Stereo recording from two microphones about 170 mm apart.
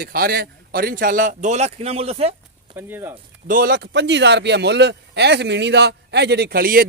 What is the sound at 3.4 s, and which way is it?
A man's voice, 55° right (ahead or behind).